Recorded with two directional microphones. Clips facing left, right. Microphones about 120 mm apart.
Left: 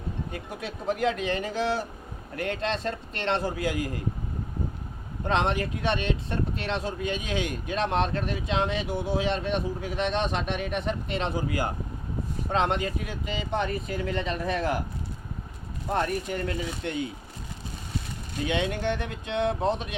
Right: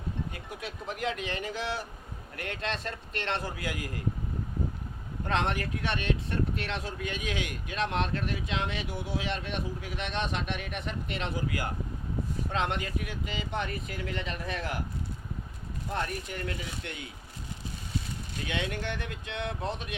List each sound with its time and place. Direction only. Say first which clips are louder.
0.6 s speech: left 7 dB; 35° left (ahead or behind)
5.2 s speech: left 4 dB; 20° left (ahead or behind)
15.9 s speech: left 7 dB; 35° left (ahead or behind)
18.4 s speech: left 7 dB; 25° left (ahead or behind)